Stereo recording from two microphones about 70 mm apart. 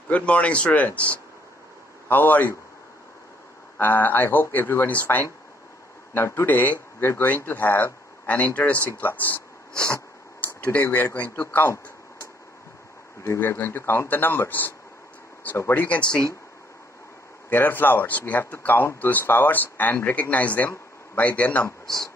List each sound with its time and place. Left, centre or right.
0.1 s speech: centre
3.7 s speech: left
13.2 s speech: left
15.7 s speech: left
17.5 s speech: left